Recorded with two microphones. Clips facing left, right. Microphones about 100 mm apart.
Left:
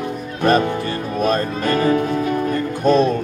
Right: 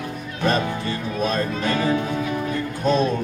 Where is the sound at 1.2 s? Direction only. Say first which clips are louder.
Left 4 dB; 50° left (ahead or behind).